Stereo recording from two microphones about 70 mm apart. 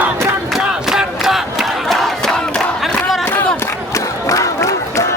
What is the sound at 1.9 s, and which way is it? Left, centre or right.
Crowd, centre.